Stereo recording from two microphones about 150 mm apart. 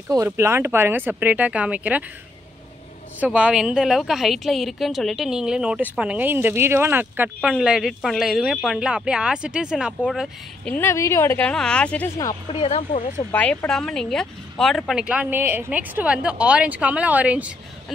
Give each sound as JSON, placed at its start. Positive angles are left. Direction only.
{"t": 0.1, "sound": "speech", "side_deg": -20}
{"t": 3.2, "sound": "a woman's voice", "side_deg": -10}
{"t": 10.6, "sound": "speech", "side_deg": 15}
{"t": 12.5, "sound": "speech", "side_deg": 40}
{"t": 13.3, "sound": "speech", "side_deg": 10}